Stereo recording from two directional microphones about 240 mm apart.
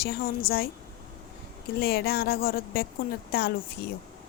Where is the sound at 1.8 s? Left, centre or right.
Left.